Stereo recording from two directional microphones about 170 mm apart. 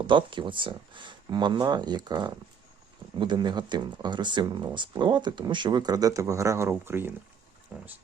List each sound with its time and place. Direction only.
0.1 s speech: 30° right (ahead or behind)